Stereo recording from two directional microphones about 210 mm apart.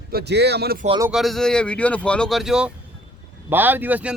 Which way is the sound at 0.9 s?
15° right (ahead or behind).